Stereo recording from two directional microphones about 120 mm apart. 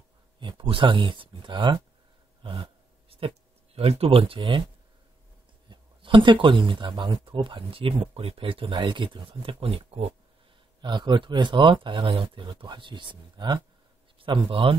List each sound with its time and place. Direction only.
0.4 s speech: 45° right (ahead or behind)
2.4 s a sound: 45° right (ahead or behind)
5.7 s speech: 45° right (ahead or behind)
10.8 s speech: 40° right (ahead or behind)